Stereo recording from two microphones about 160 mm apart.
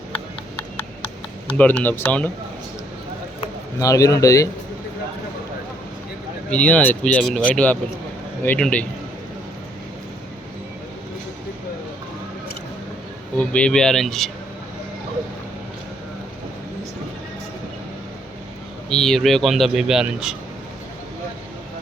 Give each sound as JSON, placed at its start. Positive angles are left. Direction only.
{"t": 1.5, "sound": "speech", "side_deg": 10}
{"t": 3.8, "sound": "speech", "side_deg": 20}
{"t": 6.5, "sound": "speech", "side_deg": 10}
{"t": 13.4, "sound": "speech", "side_deg": 5}
{"t": 18.9, "sound": "speech", "side_deg": 5}